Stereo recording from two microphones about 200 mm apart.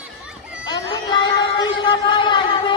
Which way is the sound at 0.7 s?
20° left (ahead or behind).